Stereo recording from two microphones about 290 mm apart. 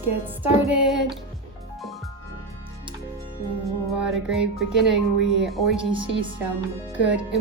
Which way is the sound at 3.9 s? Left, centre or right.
Centre.